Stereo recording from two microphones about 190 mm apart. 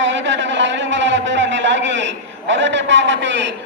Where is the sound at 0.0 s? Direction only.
75° right (ahead or behind).